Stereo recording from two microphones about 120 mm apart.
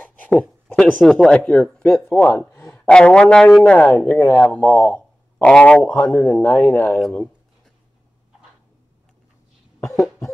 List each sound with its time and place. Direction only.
0.0 s speech: 15° left (ahead or behind)